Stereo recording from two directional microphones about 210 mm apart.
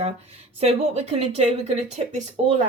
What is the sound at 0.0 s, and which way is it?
Speech, 30° right (ahead or behind).